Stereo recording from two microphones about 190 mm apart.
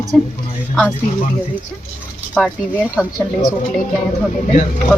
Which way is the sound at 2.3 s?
Centre (ahead or behind).